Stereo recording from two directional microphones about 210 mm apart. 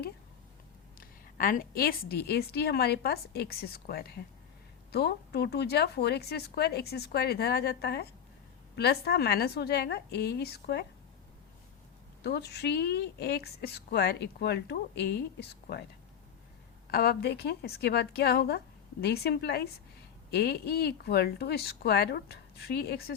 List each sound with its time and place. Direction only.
0.9 s a woman's voice: 45° left (ahead or behind)
12.2 s a woman's voice: 50° left (ahead or behind)
16.9 s a woman's voice: 50° left (ahead or behind)